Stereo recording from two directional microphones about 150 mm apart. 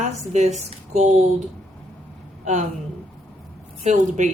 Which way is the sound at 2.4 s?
55° right (ahead or behind).